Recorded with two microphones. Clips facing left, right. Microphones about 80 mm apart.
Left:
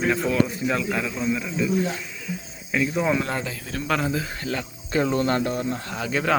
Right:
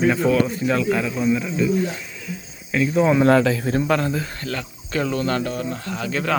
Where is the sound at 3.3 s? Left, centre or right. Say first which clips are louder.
Right 13 dB; right.